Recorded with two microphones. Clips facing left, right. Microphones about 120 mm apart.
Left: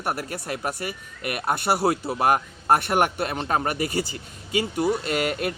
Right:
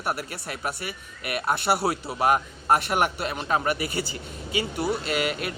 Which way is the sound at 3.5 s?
40° left (ahead or behind).